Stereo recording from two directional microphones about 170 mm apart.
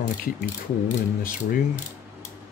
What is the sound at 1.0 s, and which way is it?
Speech, 55° left (ahead or behind).